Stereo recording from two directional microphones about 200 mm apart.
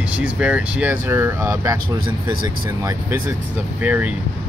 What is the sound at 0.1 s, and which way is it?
Speech, 5° right (ahead or behind).